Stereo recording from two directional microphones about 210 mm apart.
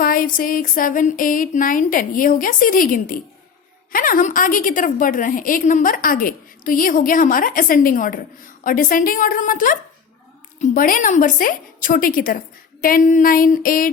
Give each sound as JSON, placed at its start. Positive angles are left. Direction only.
{"t": 0.0, "sound": "a woman's voice", "side_deg": 45}